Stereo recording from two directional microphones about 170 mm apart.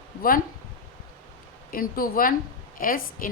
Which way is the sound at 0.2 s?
55° left (ahead or behind).